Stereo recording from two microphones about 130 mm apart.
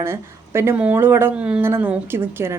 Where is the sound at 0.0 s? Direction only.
20° right (ahead or behind).